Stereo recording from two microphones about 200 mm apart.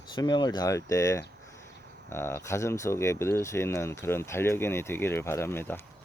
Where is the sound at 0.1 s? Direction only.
20° left (ahead or behind).